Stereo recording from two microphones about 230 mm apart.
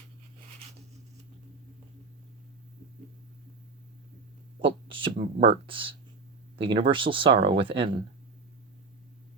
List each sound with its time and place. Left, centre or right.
4.6 s speech: right